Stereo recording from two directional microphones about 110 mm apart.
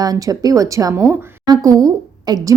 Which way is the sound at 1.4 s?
35° right (ahead or behind).